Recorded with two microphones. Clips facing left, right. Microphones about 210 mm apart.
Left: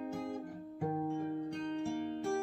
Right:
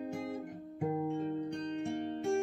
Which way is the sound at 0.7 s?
20° right (ahead or behind).